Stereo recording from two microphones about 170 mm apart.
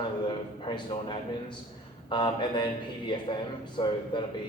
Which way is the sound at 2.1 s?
25° left (ahead or behind).